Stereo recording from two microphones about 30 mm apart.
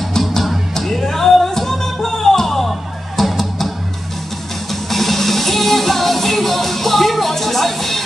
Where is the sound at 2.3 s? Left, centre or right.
Centre.